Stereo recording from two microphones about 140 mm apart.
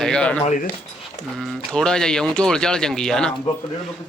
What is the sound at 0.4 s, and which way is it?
Speech, 65° left (ahead or behind).